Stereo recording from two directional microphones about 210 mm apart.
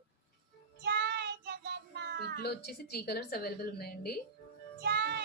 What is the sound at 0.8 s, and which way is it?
Child singing, 50° right (ahead or behind).